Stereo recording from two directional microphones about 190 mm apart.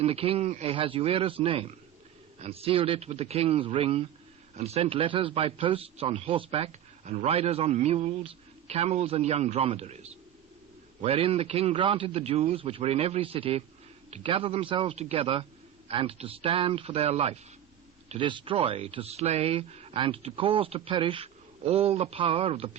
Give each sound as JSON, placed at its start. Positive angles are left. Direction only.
{"t": 0.0, "sound": "a man's voice", "side_deg": -30}